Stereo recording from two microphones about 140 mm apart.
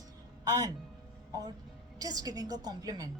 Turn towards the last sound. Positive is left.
turn(degrees=-25)  # may be behind; listen again after turning